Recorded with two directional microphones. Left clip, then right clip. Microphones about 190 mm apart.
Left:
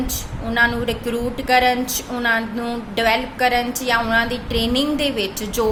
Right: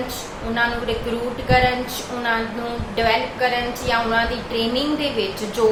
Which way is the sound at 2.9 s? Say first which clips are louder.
Left 1 dB; 55° left (ahead or behind).